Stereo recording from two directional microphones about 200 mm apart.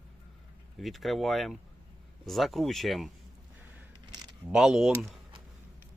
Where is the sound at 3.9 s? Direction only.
20° right (ahead or behind).